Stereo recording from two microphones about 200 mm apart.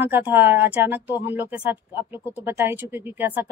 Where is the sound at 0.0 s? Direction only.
10° right (ahead or behind).